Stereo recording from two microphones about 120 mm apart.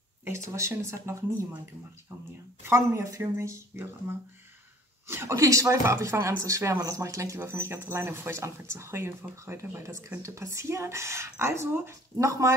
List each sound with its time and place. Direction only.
0.6 s speech: 25° right (ahead or behind)
2.6 s speech: 20° right (ahead or behind)